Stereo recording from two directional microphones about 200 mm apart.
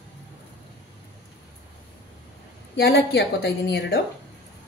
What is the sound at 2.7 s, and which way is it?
A woman's voice, 60° left (ahead or behind).